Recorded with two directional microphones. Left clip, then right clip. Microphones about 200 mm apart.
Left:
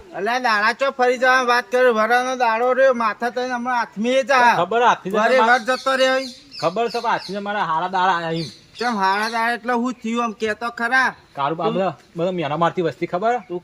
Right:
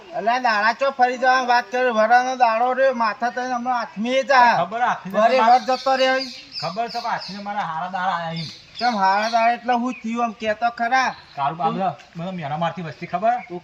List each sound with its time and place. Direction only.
0.2 s speech: 15° left (ahead or behind)
4.5 s a man's voice: 40° left (ahead or behind)
5.1 s speech: 10° left (ahead or behind)
6.6 s a man's voice: 35° left (ahead or behind)
8.8 s speech: 10° left (ahead or behind)
11.3 s a man's voice: 35° left (ahead or behind)